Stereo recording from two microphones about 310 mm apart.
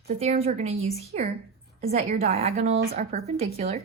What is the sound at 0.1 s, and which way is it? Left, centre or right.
Speech, centre.